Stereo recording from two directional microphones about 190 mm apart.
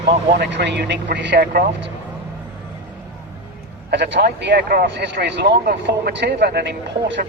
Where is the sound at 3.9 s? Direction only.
65° right (ahead or behind).